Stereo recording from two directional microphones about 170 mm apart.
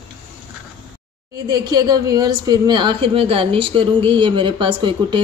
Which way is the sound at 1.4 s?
20° right (ahead or behind).